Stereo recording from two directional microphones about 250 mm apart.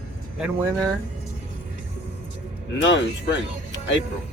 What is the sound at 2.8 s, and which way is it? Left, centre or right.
Speech, left.